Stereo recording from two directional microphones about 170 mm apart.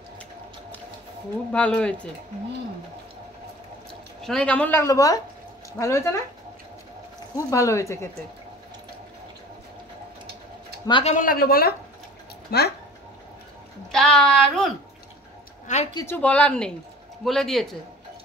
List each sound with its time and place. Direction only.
1.5 s speech: 5° left (ahead or behind)
4.2 s speech: 5° left (ahead or behind)
7.3 s speech: 20° left (ahead or behind)
10.9 s speech: 30° left (ahead or behind)
11.1 s a woman's voice: 60° left (ahead or behind)
13.9 s speech: 5° left (ahead or behind)
15.6 s speech: 40° left (ahead or behind)
15.9 s speech: 20° left (ahead or behind)
16.2 s speech: 5° left (ahead or behind)